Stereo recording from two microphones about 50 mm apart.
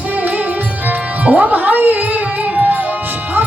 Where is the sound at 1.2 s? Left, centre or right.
Right.